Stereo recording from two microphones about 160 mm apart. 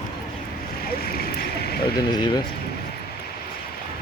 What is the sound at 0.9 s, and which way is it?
Vehicle, 70° left (ahead or behind).